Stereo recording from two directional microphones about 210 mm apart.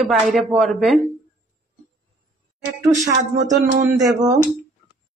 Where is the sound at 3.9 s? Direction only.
15° right (ahead or behind).